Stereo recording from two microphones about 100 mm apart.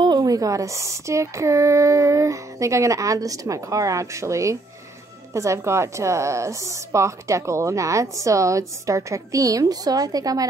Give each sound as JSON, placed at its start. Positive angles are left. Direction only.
{"t": 0.0, "sound": "a woman's voice", "side_deg": -40}